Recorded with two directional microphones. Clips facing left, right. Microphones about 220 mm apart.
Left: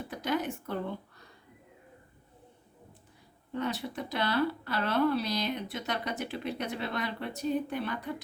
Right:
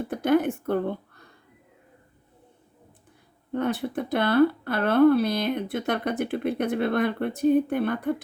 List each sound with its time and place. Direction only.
0.0 s speech: 55° right (ahead or behind)
3.5 s speech: 55° right (ahead or behind)